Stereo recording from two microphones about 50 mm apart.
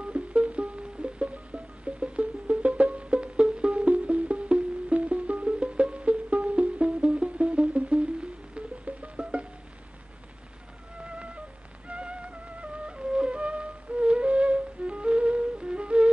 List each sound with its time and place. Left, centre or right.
0.0 s music: right
11.1 s music: right
12.8 s flute: centre